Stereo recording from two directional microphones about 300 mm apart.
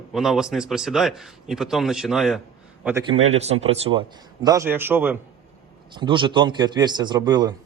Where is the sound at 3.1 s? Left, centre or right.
Right.